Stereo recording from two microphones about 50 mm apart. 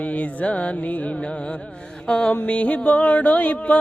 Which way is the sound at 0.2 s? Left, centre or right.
Left.